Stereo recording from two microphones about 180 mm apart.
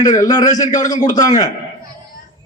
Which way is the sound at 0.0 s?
20° left (ahead or behind).